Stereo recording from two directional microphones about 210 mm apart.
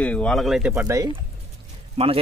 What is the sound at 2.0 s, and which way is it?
Speech, 30° right (ahead or behind).